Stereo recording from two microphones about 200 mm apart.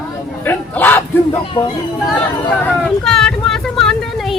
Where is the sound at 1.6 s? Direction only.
25° left (ahead or behind).